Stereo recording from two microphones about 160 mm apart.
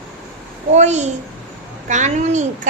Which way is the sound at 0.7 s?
45° right (ahead or behind).